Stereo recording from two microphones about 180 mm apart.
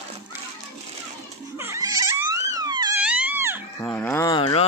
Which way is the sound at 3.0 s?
5° right (ahead or behind).